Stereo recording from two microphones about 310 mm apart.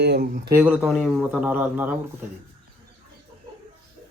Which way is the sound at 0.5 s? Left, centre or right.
Centre.